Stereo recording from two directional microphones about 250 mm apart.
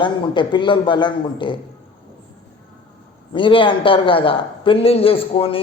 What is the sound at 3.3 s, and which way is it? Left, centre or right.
A man's voice, centre.